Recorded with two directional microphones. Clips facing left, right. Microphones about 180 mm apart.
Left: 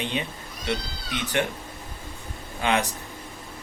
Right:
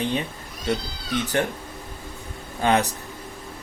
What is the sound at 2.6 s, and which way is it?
Speech, 40° right (ahead or behind).